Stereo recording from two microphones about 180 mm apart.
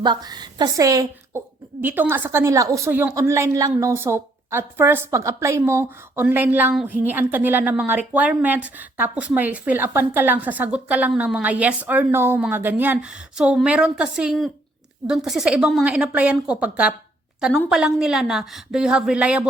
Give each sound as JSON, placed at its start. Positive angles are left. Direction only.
{"t": 0.0, "sound": "a woman's voice", "side_deg": -25}